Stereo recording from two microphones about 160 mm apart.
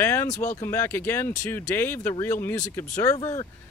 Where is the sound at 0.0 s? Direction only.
15° left (ahead or behind).